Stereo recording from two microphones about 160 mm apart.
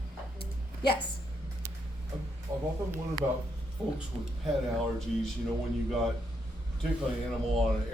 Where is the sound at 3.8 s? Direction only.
5° left (ahead or behind).